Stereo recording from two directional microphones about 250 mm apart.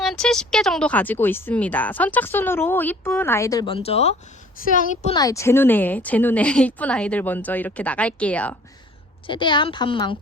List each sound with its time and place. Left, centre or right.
0.0 s a woman's voice: centre; by 5.1 s left
5.1 s speech: centre
9.2 s a woman's voice: centre